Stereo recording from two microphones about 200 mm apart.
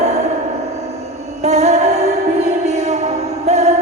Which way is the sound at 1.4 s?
35° right (ahead or behind).